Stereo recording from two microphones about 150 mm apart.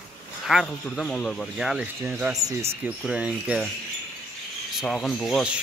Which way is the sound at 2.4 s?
25° right (ahead or behind).